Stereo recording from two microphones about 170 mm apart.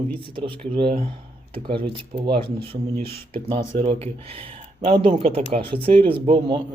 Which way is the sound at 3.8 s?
35° right (ahead or behind).